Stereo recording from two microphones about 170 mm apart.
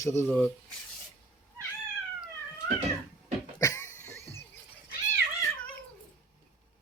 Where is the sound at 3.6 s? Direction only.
15° left (ahead or behind).